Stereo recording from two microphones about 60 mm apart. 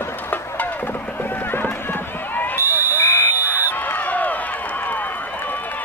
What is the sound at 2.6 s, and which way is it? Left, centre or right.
Fire alarm, left.